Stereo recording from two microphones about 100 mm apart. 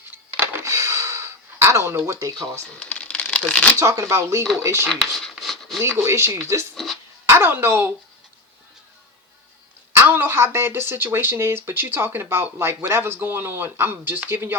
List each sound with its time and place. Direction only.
0.0 s a sound: 20° right (ahead or behind)
2.7 s crumpling: 10° left (ahead or behind)
3.8 s speech: 30° right (ahead or behind)
4.9 s a sound: 5° left (ahead or behind)
6.1 s speech: 25° right (ahead or behind)
10.0 s speech: 20° right (ahead or behind)